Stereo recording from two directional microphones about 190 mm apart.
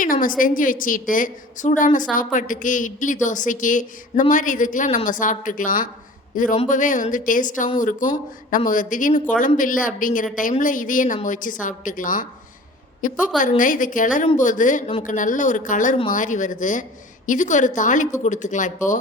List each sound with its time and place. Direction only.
0.0 s a woman's voice: 45° left (ahead or behind)